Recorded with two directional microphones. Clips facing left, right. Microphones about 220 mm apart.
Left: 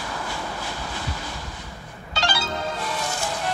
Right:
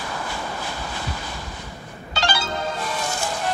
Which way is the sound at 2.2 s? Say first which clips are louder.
Right 2 dB; 50° right (ahead or behind).